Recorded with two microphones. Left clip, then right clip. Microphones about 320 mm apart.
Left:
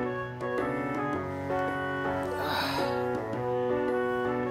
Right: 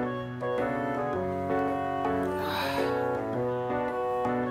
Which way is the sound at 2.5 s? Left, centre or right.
Left.